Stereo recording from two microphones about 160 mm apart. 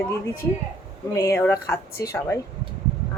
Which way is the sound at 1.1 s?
15° left (ahead or behind).